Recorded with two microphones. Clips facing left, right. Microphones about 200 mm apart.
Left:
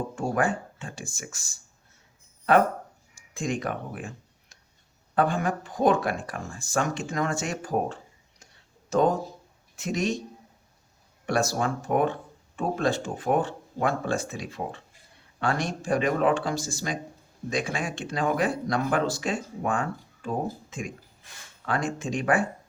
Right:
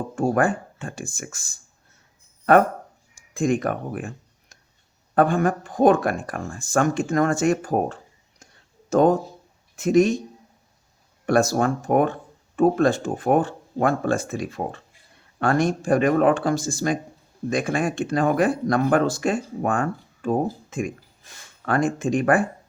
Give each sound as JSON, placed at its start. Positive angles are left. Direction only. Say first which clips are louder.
{"t": 0.2, "sound": "speech", "louder": "right 6 dB", "side_deg": -50}
{"t": 3.2, "sound": "speech", "louder": "right 8 dB", "side_deg": -50}
{"t": 11.3, "sound": "speech", "louder": "right 6 dB", "side_deg": -50}